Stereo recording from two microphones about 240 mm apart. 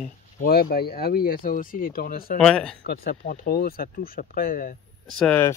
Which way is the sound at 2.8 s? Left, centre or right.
Left.